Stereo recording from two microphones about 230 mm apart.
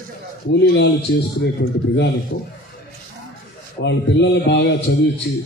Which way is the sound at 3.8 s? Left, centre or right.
Left.